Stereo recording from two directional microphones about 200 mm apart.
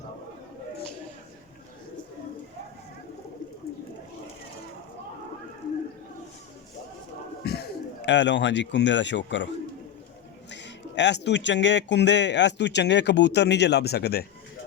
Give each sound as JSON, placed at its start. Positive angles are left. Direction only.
{"t": 7.4, "sound": "speech", "side_deg": 55}
{"t": 10.5, "sound": "speech", "side_deg": 60}